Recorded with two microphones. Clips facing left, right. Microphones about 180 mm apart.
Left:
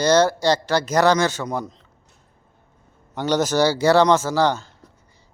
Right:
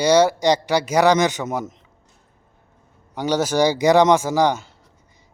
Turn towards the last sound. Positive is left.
turn(degrees=-15)  # may be behind; listen again after turning